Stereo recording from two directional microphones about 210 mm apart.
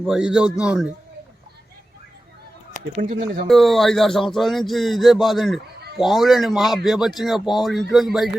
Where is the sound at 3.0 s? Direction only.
40° right (ahead or behind).